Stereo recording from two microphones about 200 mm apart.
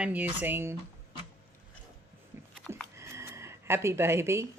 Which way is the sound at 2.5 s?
5° left (ahead or behind).